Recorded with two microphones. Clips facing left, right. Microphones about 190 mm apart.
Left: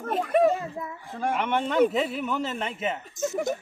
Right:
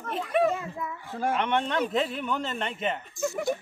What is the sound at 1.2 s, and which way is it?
A man's voice, 5° left (ahead or behind).